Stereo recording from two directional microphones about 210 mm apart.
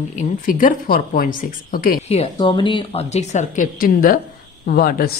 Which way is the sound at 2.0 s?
25° left (ahead or behind).